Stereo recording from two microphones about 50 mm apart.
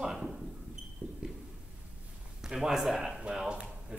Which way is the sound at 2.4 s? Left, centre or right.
Centre.